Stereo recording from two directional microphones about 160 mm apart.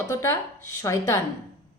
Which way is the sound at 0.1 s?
15° left (ahead or behind).